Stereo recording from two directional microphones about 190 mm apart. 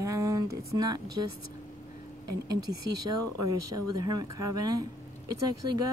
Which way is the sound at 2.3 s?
20° right (ahead or behind).